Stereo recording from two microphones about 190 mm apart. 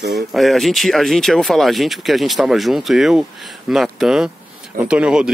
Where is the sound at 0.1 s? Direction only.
Centre (ahead or behind).